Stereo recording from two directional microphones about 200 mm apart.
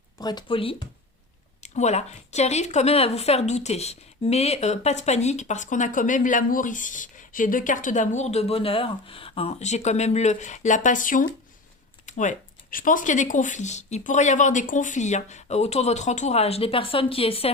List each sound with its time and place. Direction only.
0.2 s speech: 20° left (ahead or behind)